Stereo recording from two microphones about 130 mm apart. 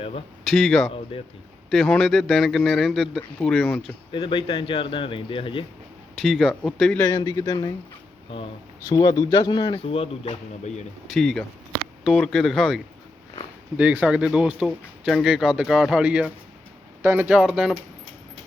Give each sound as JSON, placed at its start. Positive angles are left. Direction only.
{"t": 0.4, "sound": "speech", "side_deg": 0}
{"t": 1.1, "sound": "speech", "side_deg": 40}
{"t": 1.7, "sound": "speech", "side_deg": 5}
{"t": 4.1, "sound": "speech", "side_deg": 40}
{"t": 6.2, "sound": "speech", "side_deg": 0}
{"t": 7.0, "sound": "speech", "side_deg": 25}
{"t": 8.9, "sound": "speech", "side_deg": 30}
{"t": 11.1, "sound": "speech", "side_deg": 0}
{"t": 13.7, "sound": "speech", "side_deg": -10}